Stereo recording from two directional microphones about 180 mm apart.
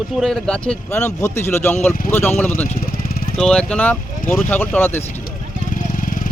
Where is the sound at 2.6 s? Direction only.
40° left (ahead or behind).